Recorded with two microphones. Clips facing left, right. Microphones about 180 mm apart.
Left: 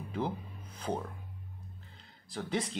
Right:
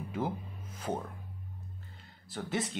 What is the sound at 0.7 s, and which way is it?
Music, 5° right (ahead or behind).